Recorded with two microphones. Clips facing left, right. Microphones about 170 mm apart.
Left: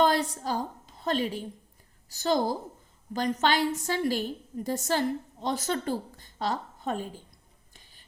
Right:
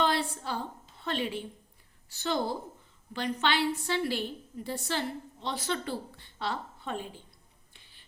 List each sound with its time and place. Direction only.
0.0 s a woman's voice: 40° left (ahead or behind)
7.7 s whispering: 40° left (ahead or behind)